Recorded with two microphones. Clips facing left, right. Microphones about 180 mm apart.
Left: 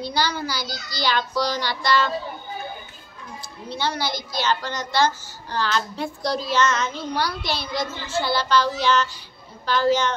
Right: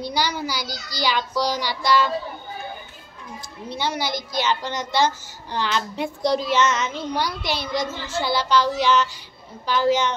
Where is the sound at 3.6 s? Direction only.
20° right (ahead or behind).